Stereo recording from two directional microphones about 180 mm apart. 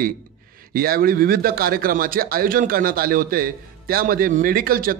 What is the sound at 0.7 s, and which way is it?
A man's voice, 55° right (ahead or behind).